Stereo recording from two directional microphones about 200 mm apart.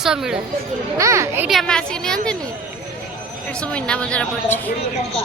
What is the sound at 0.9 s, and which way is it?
Speech, 15° right (ahead or behind).